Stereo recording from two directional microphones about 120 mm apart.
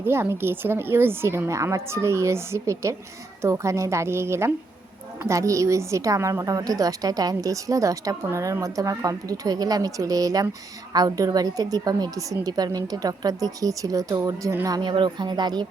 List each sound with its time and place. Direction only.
0.0 s a woman's voice: 20° right (ahead or behind)
14.8 s a woman's voice: 40° right (ahead or behind)